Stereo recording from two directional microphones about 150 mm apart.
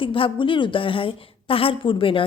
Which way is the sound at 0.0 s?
35° left (ahead or behind).